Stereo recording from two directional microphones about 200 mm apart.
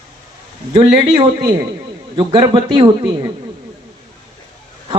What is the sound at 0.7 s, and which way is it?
A man's voice, 25° right (ahead or behind).